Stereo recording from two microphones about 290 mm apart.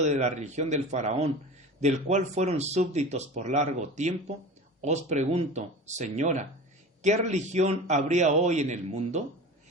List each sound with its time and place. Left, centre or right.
0.0 s speech: right